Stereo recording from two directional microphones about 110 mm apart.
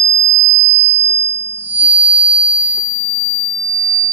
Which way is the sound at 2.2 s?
60° right (ahead or behind).